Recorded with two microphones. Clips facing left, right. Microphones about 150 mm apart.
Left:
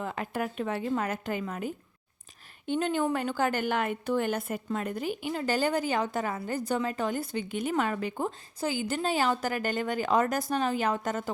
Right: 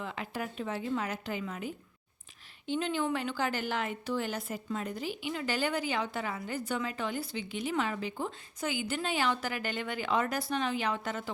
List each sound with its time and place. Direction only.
0.0 s a woman's voice: 45° left (ahead or behind)
8.6 s a woman's voice: 40° left (ahead or behind)